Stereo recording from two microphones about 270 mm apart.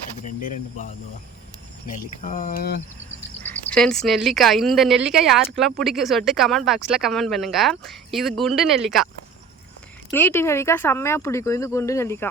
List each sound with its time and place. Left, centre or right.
2.2 s speech: left
3.4 s speech: centre
10.1 s speech: centre